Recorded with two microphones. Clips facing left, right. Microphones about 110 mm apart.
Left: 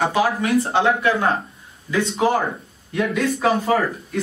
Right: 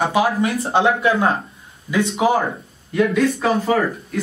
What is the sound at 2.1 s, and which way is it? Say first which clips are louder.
Speech: right 1 dB; centre (ahead or behind).